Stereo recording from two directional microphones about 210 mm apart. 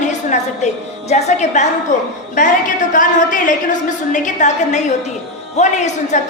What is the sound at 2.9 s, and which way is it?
A woman's voice, 40° left (ahead or behind).